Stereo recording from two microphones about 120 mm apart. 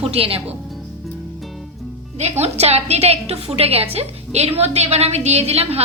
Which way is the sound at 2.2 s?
65° right (ahead or behind).